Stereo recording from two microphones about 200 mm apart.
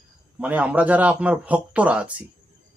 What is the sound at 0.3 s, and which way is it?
Speech, 5° right (ahead or behind).